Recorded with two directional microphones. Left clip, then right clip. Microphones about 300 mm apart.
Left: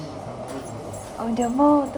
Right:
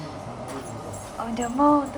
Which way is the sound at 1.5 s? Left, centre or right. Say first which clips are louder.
Left 1 dB; right.